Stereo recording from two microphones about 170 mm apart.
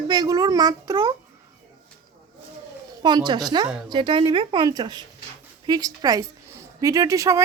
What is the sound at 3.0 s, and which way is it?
A woman's voice, 25° right (ahead or behind).